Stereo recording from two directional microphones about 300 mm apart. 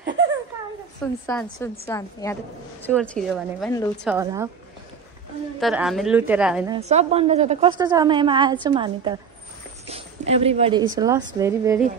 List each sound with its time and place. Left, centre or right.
1.2 s a woman's voice: centre
4.0 s a woman's voice: centre
5.6 s a woman's voice: centre
6.7 s a woman's voice: right